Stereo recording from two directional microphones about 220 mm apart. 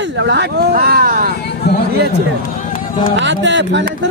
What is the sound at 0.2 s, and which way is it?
Speech, 50° right (ahead or behind).